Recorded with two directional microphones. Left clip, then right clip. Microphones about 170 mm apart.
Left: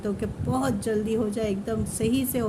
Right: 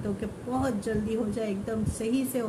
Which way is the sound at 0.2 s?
50° left (ahead or behind).